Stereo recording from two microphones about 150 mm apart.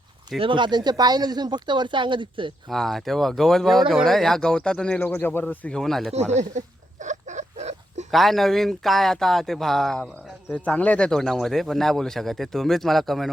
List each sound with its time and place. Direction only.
0.3 s speech: 35° right (ahead or behind)
2.6 s speech: centre (ahead or behind)
6.1 s speech: 45° right (ahead or behind)
7.0 s rodents: 55° right (ahead or behind)
8.1 s speech: centre (ahead or behind)